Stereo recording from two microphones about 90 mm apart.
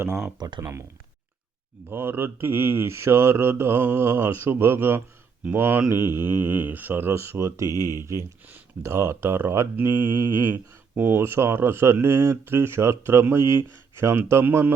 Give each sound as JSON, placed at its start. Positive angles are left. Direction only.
{"t": 0.3, "sound": "speech", "side_deg": -50}
{"t": 0.6, "sound": "speech", "side_deg": -30}
{"t": 1.9, "sound": "speech", "side_deg": -25}
{"t": 7.7, "sound": "speech", "side_deg": 40}
{"t": 8.4, "sound": "speech", "side_deg": -25}